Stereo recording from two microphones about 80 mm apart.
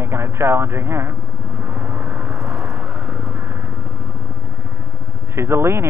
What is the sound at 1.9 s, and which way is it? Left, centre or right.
Vehicle, centre.